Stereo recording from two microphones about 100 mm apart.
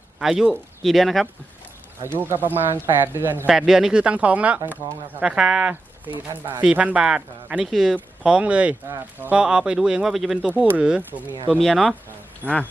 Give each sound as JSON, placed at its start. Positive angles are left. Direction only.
{"t": 0.2, "sound": "speech", "side_deg": -5}
{"t": 2.0, "sound": "speech", "side_deg": -20}
{"t": 3.4, "sound": "speech", "side_deg": -5}
{"t": 9.4, "sound": "speech", "side_deg": -10}
{"t": 11.5, "sound": "speech", "side_deg": 0}
{"t": 12.4, "sound": "speech", "side_deg": 15}